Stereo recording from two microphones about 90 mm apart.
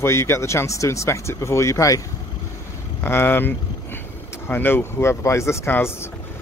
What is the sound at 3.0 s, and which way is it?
Speech, 25° left (ahead or behind).